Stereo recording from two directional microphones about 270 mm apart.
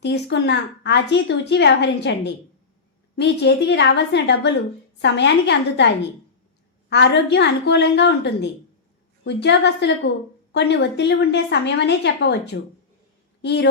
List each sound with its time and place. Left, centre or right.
0.0 s a woman's voice: left